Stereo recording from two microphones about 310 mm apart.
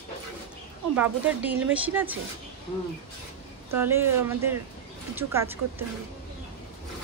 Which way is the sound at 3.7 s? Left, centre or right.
Centre.